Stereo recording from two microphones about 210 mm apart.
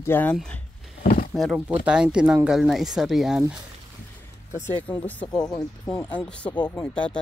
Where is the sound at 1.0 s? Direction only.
45° left (ahead or behind).